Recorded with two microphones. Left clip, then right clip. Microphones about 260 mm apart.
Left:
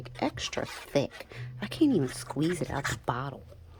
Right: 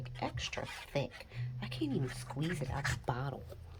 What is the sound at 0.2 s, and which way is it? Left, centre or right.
Speech, left.